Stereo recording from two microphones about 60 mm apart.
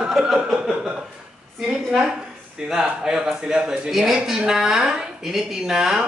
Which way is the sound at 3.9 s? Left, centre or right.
Centre.